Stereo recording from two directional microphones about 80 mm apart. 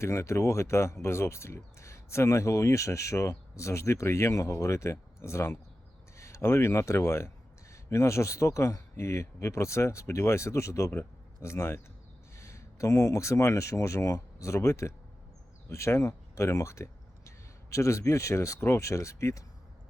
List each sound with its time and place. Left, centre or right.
0.0 s speech: left